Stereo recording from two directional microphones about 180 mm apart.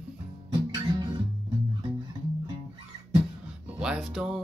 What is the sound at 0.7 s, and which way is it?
Music, 25° right (ahead or behind).